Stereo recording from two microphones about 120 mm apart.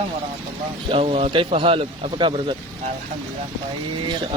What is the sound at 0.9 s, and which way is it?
Speech, 50° right (ahead or behind).